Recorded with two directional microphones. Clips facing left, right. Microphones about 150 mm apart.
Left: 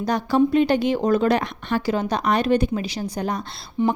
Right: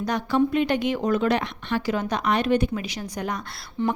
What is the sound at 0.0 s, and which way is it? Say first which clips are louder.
A woman's voice: left 3 dB; 35° left (ahead or behind).